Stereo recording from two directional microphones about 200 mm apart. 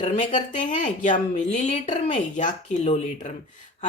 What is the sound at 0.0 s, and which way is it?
Speech, 35° left (ahead or behind).